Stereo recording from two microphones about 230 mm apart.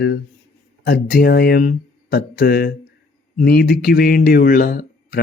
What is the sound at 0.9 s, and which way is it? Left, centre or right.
Speech, left.